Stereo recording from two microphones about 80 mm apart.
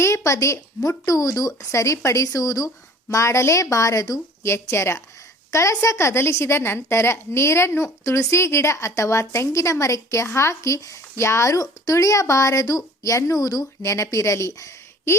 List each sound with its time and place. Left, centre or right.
0.3 s a woman's voice: left
13.8 s a woman's voice: left